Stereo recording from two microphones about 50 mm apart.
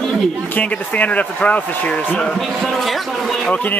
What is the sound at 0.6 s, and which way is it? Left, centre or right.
Speech, left.